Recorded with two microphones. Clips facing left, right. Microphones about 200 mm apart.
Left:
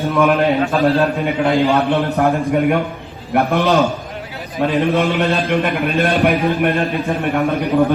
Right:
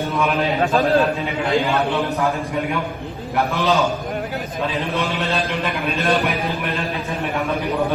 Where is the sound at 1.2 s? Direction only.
60° left (ahead or behind).